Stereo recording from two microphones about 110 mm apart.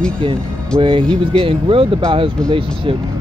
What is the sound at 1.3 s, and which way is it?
Speech, 55° right (ahead or behind).